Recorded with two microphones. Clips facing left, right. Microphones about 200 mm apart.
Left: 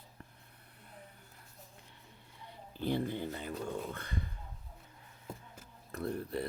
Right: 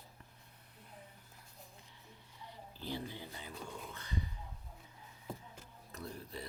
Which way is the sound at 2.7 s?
55° left (ahead or behind).